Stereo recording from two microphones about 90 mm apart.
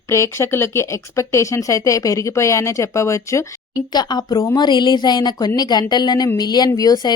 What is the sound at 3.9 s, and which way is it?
Speech, 50° left (ahead or behind).